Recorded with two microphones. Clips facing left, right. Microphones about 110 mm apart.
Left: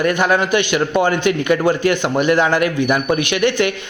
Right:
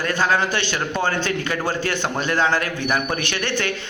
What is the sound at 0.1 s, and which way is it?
A man's voice, 15° left (ahead or behind).